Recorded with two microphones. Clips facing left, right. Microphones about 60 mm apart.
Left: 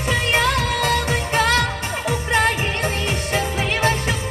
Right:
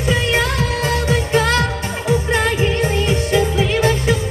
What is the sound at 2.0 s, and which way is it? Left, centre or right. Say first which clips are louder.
Music: right 2 dB; left.